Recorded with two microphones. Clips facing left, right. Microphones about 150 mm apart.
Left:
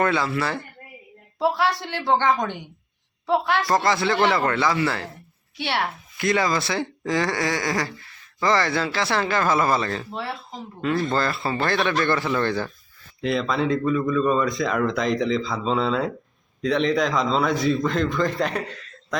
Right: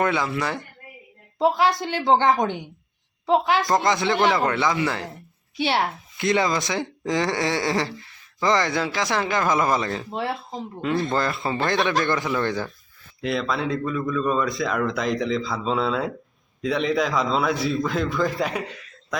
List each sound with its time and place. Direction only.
0.0 s speech: 15° right (ahead or behind)
13.2 s speech: centre (ahead or behind)